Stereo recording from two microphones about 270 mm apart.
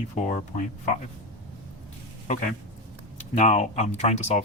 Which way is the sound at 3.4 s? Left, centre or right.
Left.